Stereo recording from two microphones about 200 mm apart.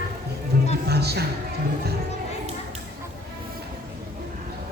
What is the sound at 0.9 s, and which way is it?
Speech, 55° right (ahead or behind).